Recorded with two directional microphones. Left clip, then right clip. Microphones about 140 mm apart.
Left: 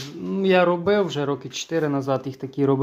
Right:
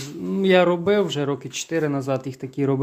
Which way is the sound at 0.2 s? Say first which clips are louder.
Right 1 dB; 30° right (ahead or behind).